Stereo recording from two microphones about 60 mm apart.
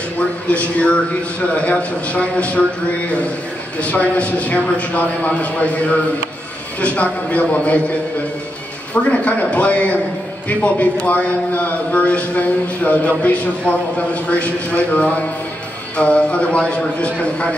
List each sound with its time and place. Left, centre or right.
0.5 s a man's voice: left
9.1 s a man's voice: left